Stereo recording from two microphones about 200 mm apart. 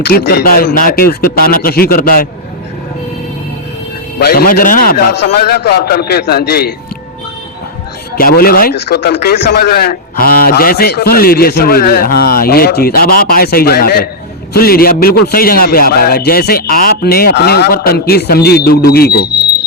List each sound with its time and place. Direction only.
0.1 s speech: 50° left (ahead or behind)
4.2 s speech: 50° left (ahead or behind)
8.1 s speech: 50° left (ahead or behind)